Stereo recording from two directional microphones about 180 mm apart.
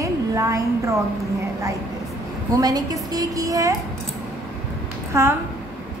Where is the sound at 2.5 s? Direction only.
20° right (ahead or behind).